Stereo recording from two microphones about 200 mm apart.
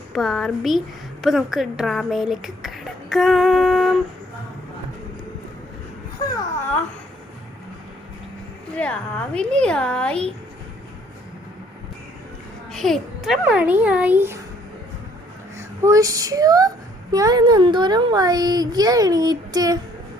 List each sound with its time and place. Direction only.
0.1 s speech: centre (ahead or behind)
8.7 s speech: 5° left (ahead or behind)
12.7 s a child's voice: centre (ahead or behind)
15.5 s speech: 15° right (ahead or behind)